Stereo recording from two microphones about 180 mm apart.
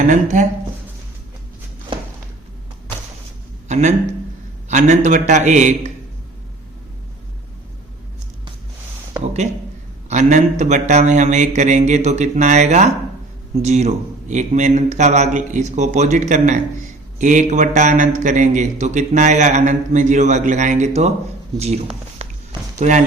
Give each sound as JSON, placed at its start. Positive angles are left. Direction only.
{"t": 0.1, "sound": "speech", "side_deg": -45}
{"t": 3.7, "sound": "a sound", "side_deg": -40}
{"t": 4.7, "sound": "a man's voice", "side_deg": -45}
{"t": 10.1, "sound": "a man's voice", "side_deg": -40}